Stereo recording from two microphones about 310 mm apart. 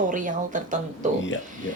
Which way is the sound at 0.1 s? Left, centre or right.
Right.